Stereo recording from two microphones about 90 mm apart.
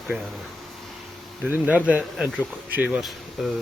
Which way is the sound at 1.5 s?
20° right (ahead or behind).